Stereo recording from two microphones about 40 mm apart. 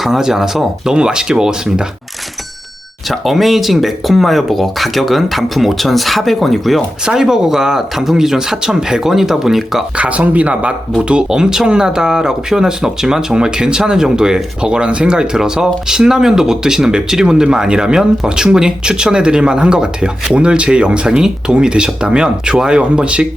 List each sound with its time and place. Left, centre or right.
0.0 s speech: centre
3.1 s speech: centre
7.0 s speech: centre
10.0 s speech: right